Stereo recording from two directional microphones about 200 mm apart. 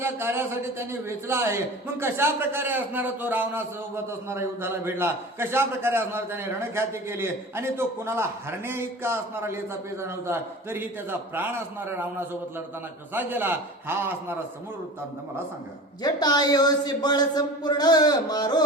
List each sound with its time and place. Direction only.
0.0 s a man's voice: 10° right (ahead or behind)
13.1 s a man's voice: 10° right (ahead or behind)
16.0 s speech: 20° left (ahead or behind)